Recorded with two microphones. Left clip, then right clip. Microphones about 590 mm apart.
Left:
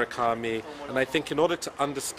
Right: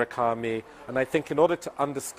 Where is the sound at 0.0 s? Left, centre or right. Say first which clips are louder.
Right 1 dB; right.